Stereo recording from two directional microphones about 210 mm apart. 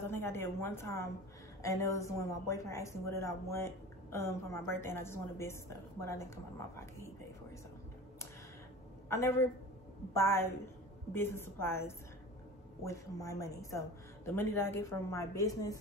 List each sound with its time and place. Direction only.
0.0 s a woman's voice: 10° left (ahead or behind)
9.1 s speech: 15° left (ahead or behind)
12.8 s speech: 15° left (ahead or behind)